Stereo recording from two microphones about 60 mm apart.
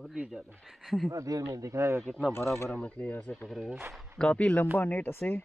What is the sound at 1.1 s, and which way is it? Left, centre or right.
Speech, right.